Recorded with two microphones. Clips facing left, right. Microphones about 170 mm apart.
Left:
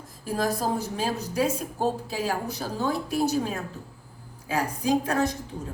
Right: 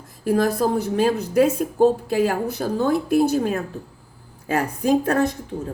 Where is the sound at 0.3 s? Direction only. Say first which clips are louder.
Right 7 dB; 60° right (ahead or behind).